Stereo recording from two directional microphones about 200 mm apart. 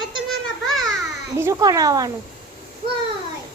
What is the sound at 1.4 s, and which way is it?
Speech, 15° right (ahead or behind).